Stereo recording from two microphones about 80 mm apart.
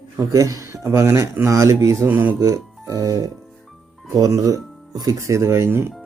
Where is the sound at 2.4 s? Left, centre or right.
Right.